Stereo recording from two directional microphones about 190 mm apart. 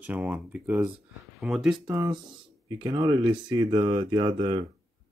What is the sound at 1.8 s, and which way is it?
Speech, 20° right (ahead or behind).